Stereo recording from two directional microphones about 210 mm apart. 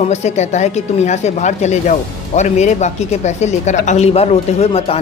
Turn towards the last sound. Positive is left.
turn(degrees=30)  # may be behind; listen again after turning